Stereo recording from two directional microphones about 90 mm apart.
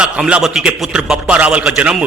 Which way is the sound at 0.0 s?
10° right (ahead or behind).